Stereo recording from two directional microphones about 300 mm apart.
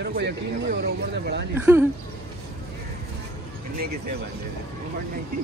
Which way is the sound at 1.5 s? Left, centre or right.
Centre.